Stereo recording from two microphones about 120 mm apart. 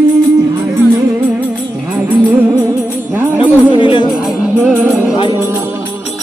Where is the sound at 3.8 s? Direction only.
45° left (ahead or behind).